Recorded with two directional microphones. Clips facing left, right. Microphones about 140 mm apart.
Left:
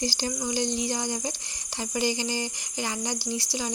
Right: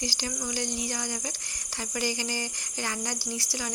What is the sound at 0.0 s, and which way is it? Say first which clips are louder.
Speech: left 4 dB; 30° left (ahead or behind).